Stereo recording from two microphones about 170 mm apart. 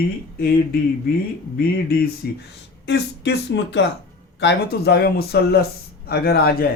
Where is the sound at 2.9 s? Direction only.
90° left.